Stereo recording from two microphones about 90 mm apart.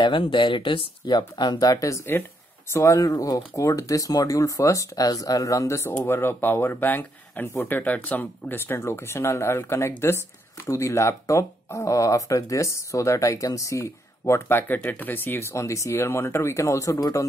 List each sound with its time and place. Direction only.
0.0 s speech: 65° left (ahead or behind); by 17.3 s 35° left (ahead or behind)